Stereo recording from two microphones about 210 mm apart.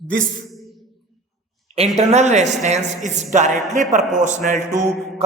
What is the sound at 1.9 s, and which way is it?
A man's voice, 35° right (ahead or behind).